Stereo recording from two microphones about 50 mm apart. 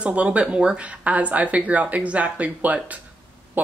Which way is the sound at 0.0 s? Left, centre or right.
Right.